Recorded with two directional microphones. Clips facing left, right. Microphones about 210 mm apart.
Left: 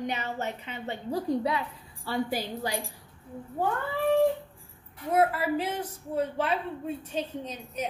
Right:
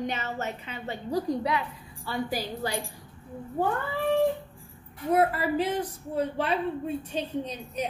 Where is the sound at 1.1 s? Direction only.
25° left (ahead or behind).